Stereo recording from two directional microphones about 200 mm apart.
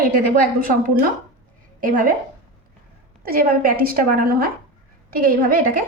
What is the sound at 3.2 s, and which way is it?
A woman's voice, 45° right (ahead or behind).